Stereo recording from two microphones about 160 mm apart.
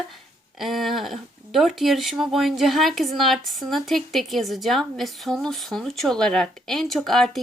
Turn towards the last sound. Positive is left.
turn(degrees=0)  # may be behind; listen again after turning